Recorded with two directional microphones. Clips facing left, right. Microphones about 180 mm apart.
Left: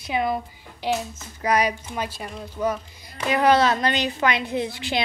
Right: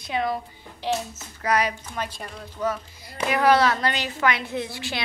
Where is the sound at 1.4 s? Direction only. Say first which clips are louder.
Left 2 dB; 15° left (ahead or behind).